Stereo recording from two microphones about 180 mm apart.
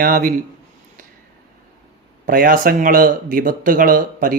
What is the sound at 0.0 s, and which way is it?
Speech, 55° right (ahead or behind).